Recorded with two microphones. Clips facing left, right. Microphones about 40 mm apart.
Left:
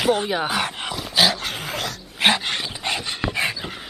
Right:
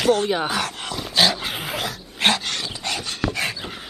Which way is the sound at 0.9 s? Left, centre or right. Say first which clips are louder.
Even; centre.